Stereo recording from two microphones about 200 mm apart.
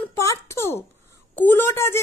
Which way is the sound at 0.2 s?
15° left (ahead or behind).